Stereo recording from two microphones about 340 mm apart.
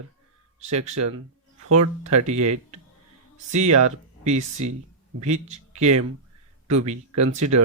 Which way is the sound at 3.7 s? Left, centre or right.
Right.